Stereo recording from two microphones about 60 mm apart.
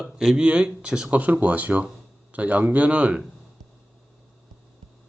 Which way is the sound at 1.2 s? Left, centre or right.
Right.